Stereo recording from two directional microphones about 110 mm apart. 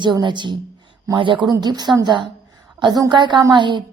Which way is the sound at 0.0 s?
45° right (ahead or behind).